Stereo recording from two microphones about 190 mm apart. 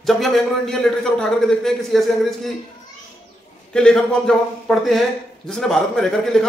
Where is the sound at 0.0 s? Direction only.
Centre (ahead or behind).